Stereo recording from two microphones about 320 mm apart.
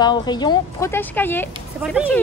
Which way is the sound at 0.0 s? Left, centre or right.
Centre.